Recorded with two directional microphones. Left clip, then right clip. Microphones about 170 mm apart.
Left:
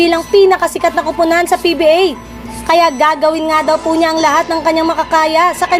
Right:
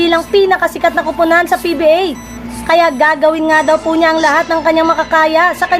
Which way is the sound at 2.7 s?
25° left (ahead or behind).